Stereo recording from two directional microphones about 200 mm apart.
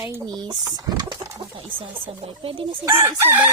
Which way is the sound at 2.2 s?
30° right (ahead or behind).